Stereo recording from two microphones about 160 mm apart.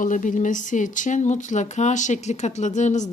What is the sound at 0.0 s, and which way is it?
Speech, 50° left (ahead or behind).